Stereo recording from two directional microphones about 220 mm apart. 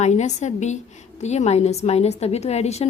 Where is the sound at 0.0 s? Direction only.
30° left (ahead or behind).